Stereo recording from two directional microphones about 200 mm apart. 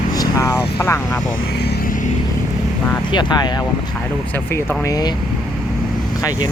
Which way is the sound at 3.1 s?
20° left (ahead or behind).